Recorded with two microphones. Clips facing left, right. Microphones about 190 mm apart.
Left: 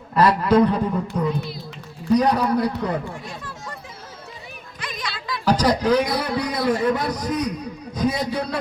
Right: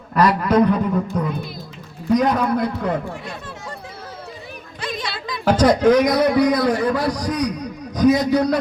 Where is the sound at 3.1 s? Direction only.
65° right (ahead or behind).